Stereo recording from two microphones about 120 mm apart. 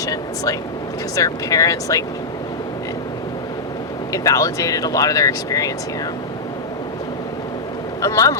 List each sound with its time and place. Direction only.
0.0 s speech: 30° left (ahead or behind)
4.1 s speech: 30° left (ahead or behind)
8.0 s speech: 30° left (ahead or behind)